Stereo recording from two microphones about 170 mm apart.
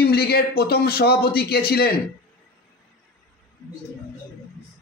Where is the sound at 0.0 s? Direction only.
70° left (ahead or behind).